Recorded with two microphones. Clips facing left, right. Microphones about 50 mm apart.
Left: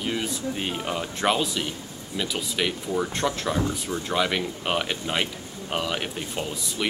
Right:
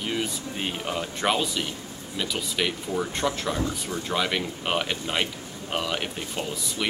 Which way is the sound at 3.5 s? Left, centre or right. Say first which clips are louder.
Left 2 dB; left.